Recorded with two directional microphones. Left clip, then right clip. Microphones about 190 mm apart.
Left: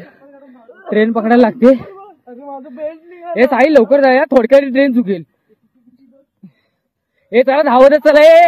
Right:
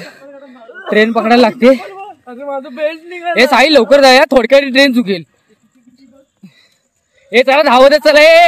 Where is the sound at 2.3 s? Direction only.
90° right.